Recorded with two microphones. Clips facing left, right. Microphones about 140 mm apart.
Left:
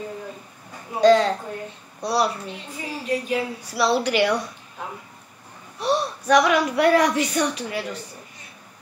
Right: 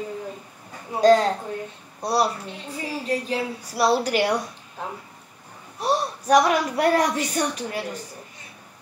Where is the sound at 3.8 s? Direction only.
40° right (ahead or behind).